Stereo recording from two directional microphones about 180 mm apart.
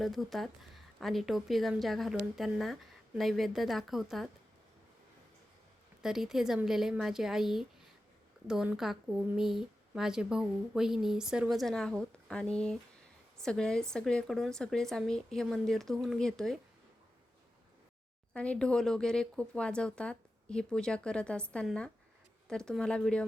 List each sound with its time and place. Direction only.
0.0 s speech: centre (ahead or behind)
6.0 s speech: centre (ahead or behind)
18.3 s speech: 5° left (ahead or behind)